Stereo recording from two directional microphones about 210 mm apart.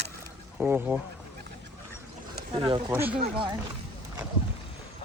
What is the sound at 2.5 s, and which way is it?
Speech, 25° right (ahead or behind).